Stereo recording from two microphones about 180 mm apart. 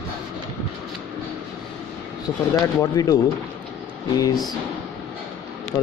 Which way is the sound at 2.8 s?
20° left (ahead or behind).